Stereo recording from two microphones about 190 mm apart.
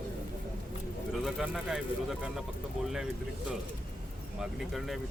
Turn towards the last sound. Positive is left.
turn(degrees=0)  # may be behind; listen again after turning